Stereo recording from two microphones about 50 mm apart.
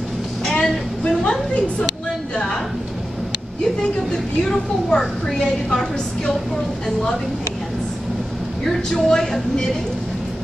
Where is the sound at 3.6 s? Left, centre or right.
Centre.